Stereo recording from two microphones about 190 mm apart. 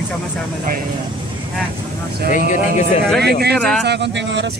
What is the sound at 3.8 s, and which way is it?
Speech, 65° right (ahead or behind).